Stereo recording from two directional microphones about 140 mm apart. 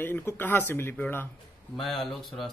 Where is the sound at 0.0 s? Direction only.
15° left (ahead or behind).